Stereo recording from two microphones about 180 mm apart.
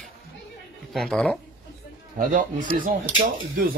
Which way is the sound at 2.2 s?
50° right (ahead or behind).